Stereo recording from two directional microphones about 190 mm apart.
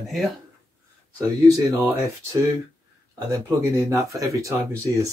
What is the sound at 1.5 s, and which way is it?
Speech, 15° right (ahead or behind).